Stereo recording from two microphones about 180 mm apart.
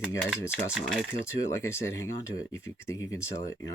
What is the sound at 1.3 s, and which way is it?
Speech, 15° left (ahead or behind).